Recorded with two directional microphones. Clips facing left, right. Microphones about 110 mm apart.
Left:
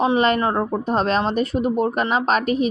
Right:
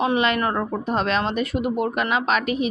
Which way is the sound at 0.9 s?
35° left (ahead or behind).